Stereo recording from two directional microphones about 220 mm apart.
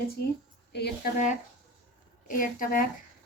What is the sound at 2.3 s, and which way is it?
Speech, 40° left (ahead or behind).